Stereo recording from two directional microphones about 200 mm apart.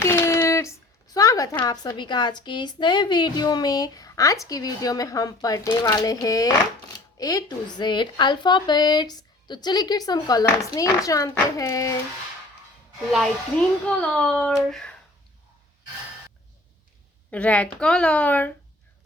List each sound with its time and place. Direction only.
0.0 s a sound: 15° left (ahead or behind)
1.1 s a woman's voice: 15° left (ahead or behind)
13.8 s speech: 5° left (ahead or behind)
17.3 s a woman's voice: 5° left (ahead or behind)